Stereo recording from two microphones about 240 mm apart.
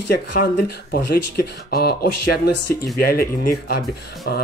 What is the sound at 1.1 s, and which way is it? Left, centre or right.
Speech, left.